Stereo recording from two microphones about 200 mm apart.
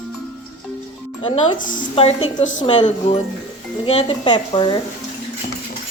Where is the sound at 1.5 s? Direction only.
40° left (ahead or behind).